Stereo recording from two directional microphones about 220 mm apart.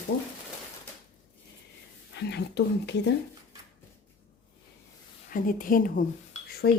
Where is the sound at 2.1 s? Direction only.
50° left (ahead or behind).